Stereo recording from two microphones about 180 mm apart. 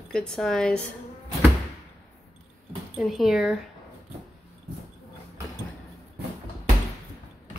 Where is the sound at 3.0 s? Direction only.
Centre (ahead or behind).